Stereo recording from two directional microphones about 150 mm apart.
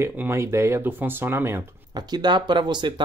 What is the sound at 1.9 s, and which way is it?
Speech, 30° right (ahead or behind).